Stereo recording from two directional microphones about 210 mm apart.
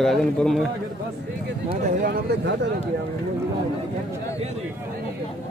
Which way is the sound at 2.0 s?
50° right (ahead or behind).